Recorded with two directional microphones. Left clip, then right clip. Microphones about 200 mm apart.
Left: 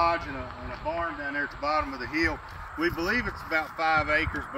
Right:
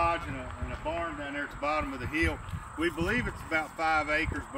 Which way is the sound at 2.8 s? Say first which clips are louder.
Left 3 dB; 10° right (ahead or behind).